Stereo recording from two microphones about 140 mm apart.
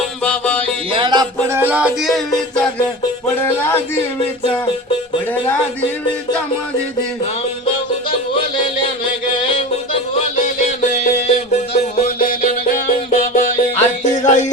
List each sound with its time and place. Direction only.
0.3 s music: 10° left (ahead or behind)
0.9 s music: 30° right (ahead or behind)
1.5 s music: 15° right (ahead or behind)
3.3 s music: 15° left (ahead or behind)
9.3 s music: 35° left (ahead or behind)
10.4 s music: 60° left (ahead or behind)
12.0 s music: 90° left
13.1 s music: 50° left (ahead or behind)